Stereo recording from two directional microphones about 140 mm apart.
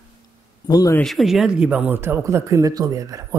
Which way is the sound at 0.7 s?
25° left (ahead or behind).